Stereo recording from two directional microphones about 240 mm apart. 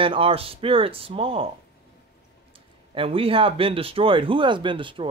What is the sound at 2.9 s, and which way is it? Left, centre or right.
Speech, right.